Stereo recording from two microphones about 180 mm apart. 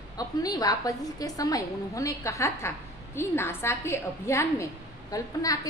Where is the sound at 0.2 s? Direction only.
20° left (ahead or behind).